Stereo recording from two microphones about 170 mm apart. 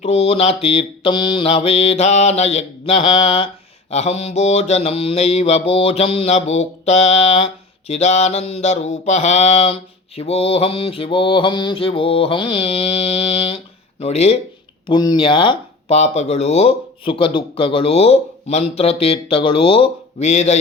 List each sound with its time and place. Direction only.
0.0 s mantra: 35° left (ahead or behind)
14.8 s mantra: 25° left (ahead or behind); by 20.6 s 40° left (ahead or behind)